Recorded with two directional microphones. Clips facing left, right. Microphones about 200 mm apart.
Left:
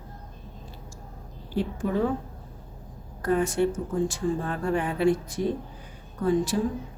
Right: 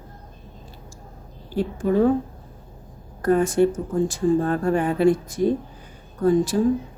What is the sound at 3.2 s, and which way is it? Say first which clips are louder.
A woman's voice: right 6 dB; 45° right (ahead or behind).